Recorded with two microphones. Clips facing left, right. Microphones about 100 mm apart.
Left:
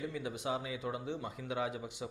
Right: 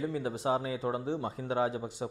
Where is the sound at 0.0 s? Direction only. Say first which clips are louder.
Right 6 dB; 35° right (ahead or behind).